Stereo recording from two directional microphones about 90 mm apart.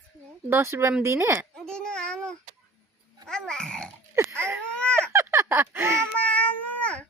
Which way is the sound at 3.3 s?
5° left (ahead or behind).